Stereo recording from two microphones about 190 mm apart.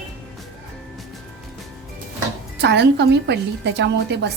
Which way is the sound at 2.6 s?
65° right (ahead or behind).